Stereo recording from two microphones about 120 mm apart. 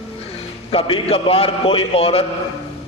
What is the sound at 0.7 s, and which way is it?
A man's voice, 50° left (ahead or behind).